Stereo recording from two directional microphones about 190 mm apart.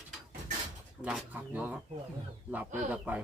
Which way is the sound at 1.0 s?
5° right (ahead or behind).